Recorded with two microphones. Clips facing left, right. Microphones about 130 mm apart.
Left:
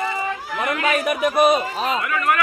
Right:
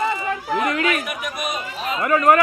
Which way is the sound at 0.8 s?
35° left (ahead or behind).